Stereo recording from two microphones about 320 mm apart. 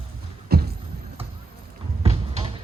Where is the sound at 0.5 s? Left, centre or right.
Right.